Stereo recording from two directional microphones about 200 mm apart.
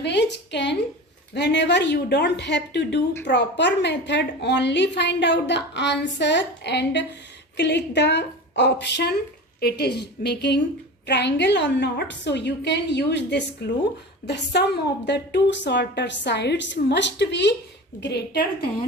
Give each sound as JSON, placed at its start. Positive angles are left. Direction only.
{"t": 0.0, "sound": "a woman's voice", "side_deg": 60}